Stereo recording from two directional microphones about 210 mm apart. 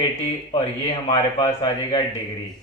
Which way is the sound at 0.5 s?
30° left (ahead or behind).